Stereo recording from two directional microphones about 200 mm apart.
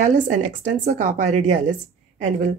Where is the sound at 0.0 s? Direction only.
40° right (ahead or behind).